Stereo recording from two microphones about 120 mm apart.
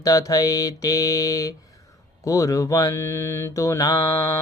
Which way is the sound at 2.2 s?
25° left (ahead or behind).